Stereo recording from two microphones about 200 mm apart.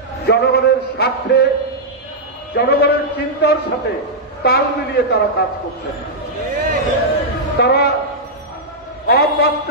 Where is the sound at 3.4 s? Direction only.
55° left (ahead or behind).